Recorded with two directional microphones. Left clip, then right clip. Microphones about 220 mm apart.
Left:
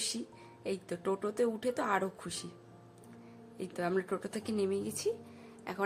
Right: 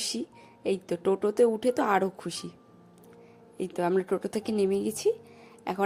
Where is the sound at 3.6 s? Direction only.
20° right (ahead or behind).